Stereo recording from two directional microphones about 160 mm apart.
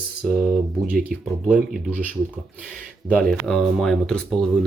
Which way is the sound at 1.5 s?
10° right (ahead or behind).